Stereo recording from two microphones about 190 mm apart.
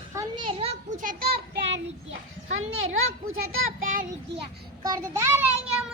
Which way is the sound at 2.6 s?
90° right.